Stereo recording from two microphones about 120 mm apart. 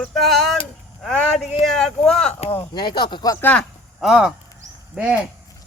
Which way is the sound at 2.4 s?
55° left (ahead or behind).